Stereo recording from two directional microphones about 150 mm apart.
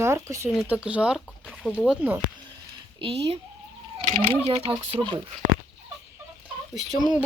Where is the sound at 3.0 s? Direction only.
40° right (ahead or behind).